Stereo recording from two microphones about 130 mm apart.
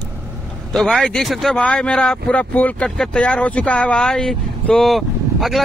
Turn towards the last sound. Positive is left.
turn(degrees=0)  # may be behind; listen again after turning